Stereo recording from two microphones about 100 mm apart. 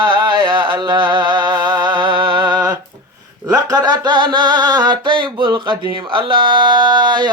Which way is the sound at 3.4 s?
40° right (ahead or behind).